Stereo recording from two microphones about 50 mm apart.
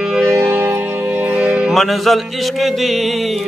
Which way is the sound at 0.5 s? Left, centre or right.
Right.